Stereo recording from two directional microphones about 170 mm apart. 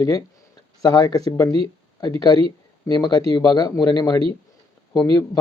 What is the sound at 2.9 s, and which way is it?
Speech, 15° left (ahead or behind).